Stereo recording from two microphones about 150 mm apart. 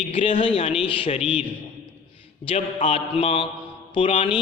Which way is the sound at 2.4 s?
45° left (ahead or behind).